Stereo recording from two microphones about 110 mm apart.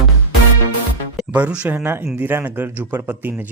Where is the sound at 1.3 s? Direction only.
10° right (ahead or behind).